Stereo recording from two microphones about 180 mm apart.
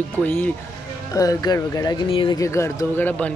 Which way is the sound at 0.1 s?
10° left (ahead or behind).